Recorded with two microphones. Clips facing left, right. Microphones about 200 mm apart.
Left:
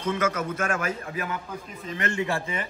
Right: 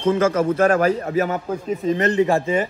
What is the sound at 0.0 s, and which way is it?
Speech, 30° right (ahead or behind).